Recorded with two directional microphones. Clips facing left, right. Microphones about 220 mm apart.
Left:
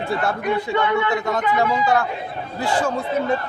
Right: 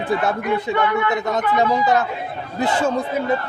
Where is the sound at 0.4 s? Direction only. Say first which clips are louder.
Right 1 dB; 25° left (ahead or behind).